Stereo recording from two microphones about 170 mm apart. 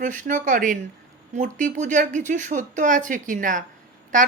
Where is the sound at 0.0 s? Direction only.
50° right (ahead or behind).